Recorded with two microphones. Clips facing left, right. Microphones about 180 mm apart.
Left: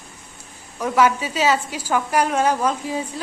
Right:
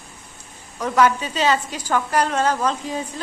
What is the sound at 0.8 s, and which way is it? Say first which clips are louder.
A woman's voice: even; 10° left (ahead or behind).